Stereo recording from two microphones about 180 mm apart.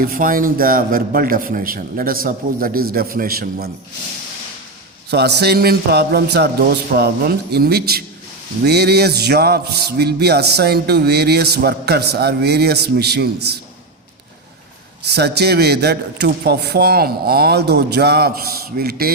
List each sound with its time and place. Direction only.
0.0 s a man's voice: 50° right (ahead or behind)
5.1 s speech: 65° right (ahead or behind)
15.1 s speech: 65° right (ahead or behind)